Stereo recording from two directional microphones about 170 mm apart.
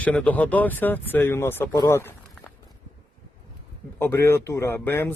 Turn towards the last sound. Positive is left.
turn(degrees=10)  # may be behind; listen again after turning